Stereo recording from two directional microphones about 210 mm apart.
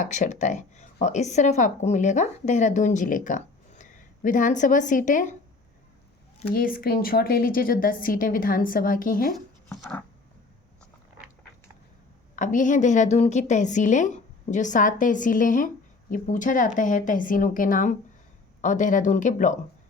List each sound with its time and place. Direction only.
0.0 s a woman's voice: 35° left (ahead or behind)
6.5 s speech: 45° left (ahead or behind)
9.3 s speech: 5° left (ahead or behind)
12.4 s a woman's voice: 35° left (ahead or behind)